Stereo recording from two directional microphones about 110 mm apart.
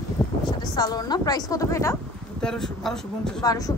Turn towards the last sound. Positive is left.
turn(degrees=35)  # may be behind; listen again after turning